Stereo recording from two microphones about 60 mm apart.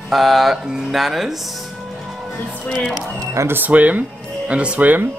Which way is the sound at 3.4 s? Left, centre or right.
Right.